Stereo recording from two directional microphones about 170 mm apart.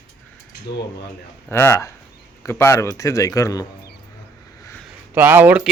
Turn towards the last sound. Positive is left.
turn(degrees=-10)  # may be behind; listen again after turning